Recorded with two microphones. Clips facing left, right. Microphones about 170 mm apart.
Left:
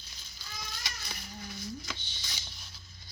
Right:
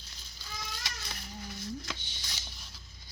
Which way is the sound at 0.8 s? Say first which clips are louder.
Even; centre (ahead or behind).